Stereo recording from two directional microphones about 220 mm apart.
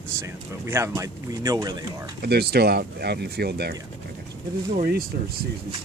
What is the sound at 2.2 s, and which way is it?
Speech, 45° right (ahead or behind).